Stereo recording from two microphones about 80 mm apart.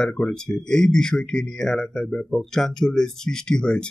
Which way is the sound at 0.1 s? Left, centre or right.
Centre.